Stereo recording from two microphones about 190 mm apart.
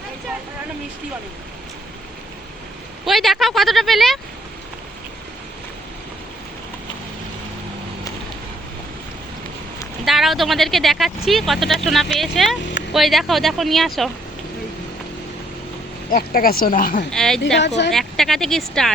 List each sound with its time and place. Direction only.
3.1 s speech: centre (ahead or behind)
10.1 s speech: centre (ahead or behind)
16.0 s speech: 50° left (ahead or behind)
17.1 s speech: 5° left (ahead or behind)